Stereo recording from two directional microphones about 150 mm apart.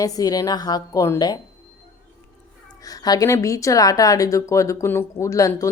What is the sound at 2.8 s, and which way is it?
Speech, 25° left (ahead or behind).